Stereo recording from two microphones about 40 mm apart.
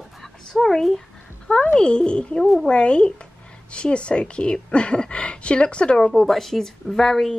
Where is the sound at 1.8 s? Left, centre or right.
Left.